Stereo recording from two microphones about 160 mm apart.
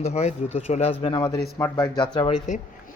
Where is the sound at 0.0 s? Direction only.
45° left (ahead or behind).